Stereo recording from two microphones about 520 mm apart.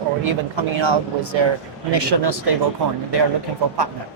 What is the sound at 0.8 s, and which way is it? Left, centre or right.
A woman's voice, right.